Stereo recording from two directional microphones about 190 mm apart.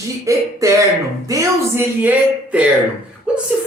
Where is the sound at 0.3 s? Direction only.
15° right (ahead or behind).